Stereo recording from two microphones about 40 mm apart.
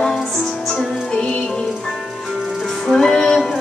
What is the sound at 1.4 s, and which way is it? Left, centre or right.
Music, centre.